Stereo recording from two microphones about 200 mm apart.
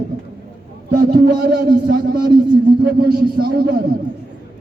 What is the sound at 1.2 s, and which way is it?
A man's voice, 50° right (ahead or behind).